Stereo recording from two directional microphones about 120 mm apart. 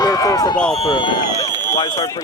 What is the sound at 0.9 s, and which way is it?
Speech, 45° left (ahead or behind).